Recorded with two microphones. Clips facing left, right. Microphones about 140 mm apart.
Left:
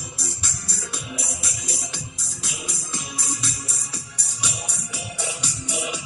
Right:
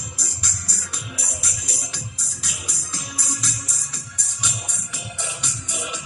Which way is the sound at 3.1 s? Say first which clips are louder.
Left 1 dB; 25° left (ahead or behind).